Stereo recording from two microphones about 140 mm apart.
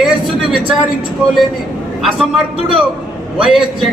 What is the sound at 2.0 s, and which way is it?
Speech, 5° right (ahead or behind).